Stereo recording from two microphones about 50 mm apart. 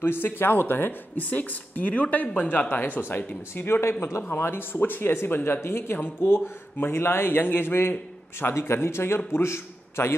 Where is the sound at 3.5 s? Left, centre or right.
Left.